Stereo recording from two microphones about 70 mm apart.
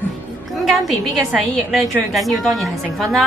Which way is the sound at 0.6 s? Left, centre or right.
Centre.